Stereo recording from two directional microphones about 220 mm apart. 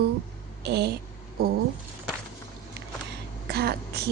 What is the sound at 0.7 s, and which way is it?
Speech, 50° right (ahead or behind).